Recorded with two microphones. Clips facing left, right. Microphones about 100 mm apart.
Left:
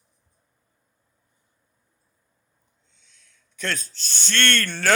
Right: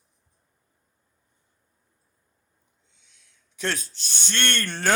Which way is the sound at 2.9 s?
15° right (ahead or behind).